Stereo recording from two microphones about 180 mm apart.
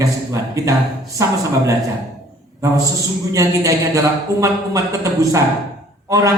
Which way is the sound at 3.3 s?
20° right (ahead or behind).